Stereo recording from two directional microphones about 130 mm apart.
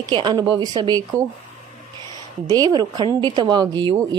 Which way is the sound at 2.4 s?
30° right (ahead or behind).